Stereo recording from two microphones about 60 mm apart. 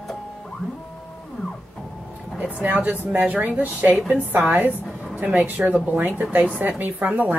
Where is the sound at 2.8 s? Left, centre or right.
Right.